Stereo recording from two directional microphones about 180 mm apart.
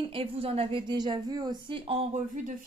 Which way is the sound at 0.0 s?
30° right (ahead or behind).